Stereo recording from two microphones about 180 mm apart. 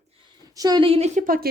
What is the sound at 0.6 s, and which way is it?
Speech, 25° right (ahead or behind).